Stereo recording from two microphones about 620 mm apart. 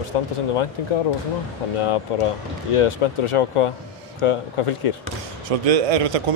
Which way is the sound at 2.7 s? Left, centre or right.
Left.